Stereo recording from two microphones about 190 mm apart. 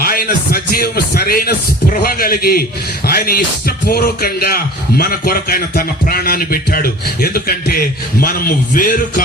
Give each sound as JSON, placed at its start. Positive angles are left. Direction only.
{"t": 0.0, "sound": "speech", "side_deg": 50}